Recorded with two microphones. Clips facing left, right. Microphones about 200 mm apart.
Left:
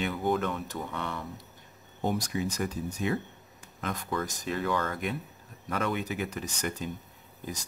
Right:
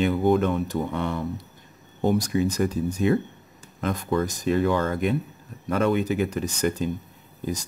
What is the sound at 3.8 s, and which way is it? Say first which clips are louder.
Speech: right 8 dB; 30° right (ahead or behind).